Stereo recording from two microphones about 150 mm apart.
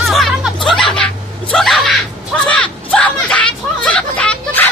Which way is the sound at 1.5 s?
Centre (ahead or behind).